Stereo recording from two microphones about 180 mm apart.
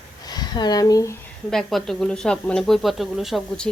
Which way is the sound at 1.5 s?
Centre (ahead or behind).